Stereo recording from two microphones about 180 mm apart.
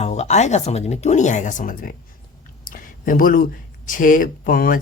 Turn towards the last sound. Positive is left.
turn(degrees=50)  # may be behind; listen again after turning